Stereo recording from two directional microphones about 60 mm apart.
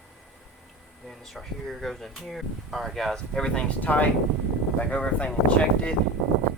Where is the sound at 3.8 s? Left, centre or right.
Left.